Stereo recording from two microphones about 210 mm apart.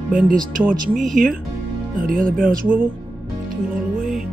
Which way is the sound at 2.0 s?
40° right (ahead or behind).